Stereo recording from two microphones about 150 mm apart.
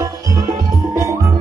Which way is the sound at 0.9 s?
20° right (ahead or behind).